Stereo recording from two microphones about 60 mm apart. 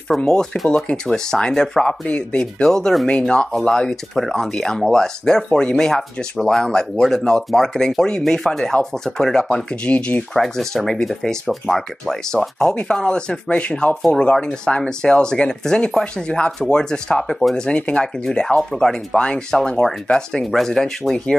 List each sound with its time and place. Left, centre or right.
0.2 s speech: centre
10.3 s speech: centre